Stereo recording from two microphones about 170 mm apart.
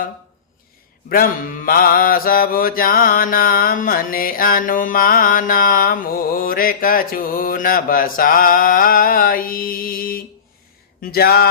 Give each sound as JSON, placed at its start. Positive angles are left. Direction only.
{"t": 1.1, "sound": "mantra", "side_deg": 60}